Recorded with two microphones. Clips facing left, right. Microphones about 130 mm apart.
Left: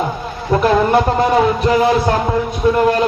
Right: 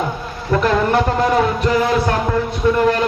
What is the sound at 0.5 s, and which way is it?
A man's voice, 15° left (ahead or behind).